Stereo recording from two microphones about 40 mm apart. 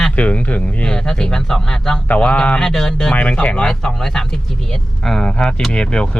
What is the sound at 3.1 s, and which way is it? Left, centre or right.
Speech, left.